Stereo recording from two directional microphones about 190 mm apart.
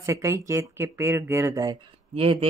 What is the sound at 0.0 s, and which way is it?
Speech, 15° right (ahead or behind).